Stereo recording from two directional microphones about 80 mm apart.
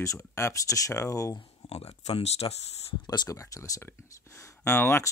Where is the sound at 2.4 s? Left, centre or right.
Left.